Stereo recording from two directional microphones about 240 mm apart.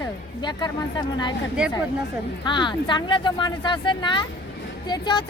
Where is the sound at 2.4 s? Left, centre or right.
Centre.